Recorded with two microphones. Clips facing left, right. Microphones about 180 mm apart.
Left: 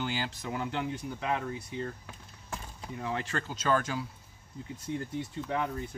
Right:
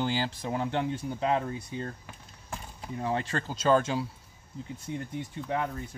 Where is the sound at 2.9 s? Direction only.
30° right (ahead or behind).